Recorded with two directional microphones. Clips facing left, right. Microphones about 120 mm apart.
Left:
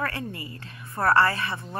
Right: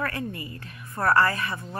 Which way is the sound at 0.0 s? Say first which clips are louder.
Right 1 dB; 25° left (ahead or behind).